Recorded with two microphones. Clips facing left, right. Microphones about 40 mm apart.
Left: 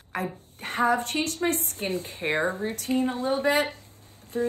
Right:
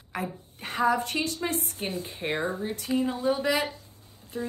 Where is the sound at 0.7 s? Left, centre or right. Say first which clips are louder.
Left 1 dB; left.